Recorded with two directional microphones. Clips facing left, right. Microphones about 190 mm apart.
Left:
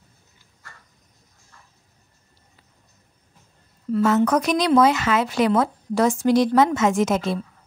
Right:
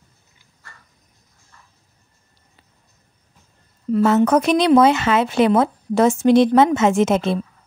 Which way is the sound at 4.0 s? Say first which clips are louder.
Right 3 dB; 25° right (ahead or behind).